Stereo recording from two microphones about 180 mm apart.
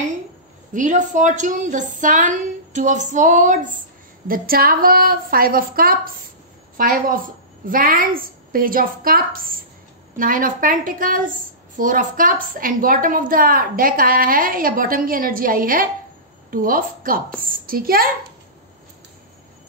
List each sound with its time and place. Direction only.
0.7 s a woman's voice: 45° right (ahead or behind)